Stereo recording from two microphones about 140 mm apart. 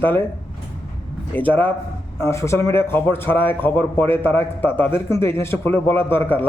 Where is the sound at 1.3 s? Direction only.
10° left (ahead or behind).